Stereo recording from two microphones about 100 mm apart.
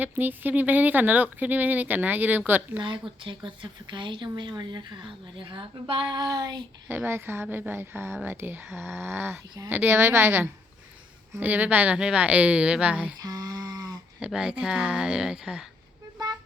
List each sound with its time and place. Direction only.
0.0 s speech: 20° right (ahead or behind)
2.8 s speech: 55° right (ahead or behind); by 6.6 s 40° right (ahead or behind)
6.8 s speech: 20° right (ahead or behind)
13.1 s a sound: 40° right (ahead or behind)
14.2 s speech: 10° right (ahead or behind)
16.1 s toot: 40° right (ahead or behind)